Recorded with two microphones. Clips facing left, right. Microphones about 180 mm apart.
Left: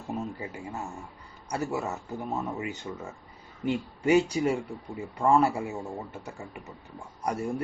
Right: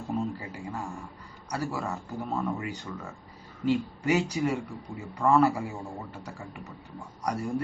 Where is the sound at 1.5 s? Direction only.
25° left (ahead or behind).